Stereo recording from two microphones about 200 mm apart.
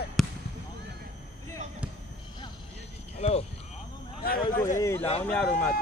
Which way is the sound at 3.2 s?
30° left (ahead or behind).